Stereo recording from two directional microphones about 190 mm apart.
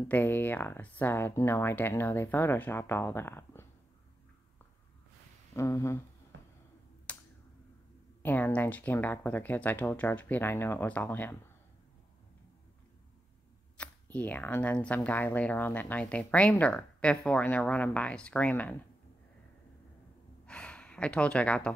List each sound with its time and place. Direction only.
0.1 s speech: 10° left (ahead or behind)
5.5 s speech: 15° left (ahead or behind)
6.3 s a sound: 85° right
7.1 s a sound: 10° left (ahead or behind)
8.2 s speech: 10° left (ahead or behind)
13.7 s speech: 10° left (ahead or behind)
20.4 s gasp: 5° left (ahead or behind)